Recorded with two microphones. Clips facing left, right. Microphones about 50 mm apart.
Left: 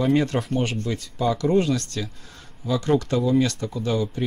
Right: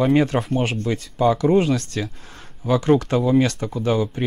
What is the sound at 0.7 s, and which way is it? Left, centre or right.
Speech, right.